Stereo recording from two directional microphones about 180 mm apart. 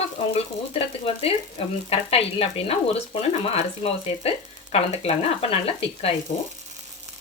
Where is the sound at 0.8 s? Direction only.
35° left (ahead or behind).